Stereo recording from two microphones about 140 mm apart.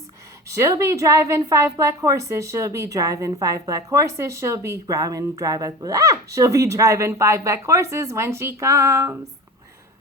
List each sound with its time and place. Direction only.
0.4 s a woman's voice: 20° right (ahead or behind)